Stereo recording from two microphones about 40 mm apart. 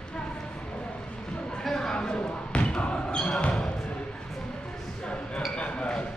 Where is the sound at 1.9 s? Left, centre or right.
Left.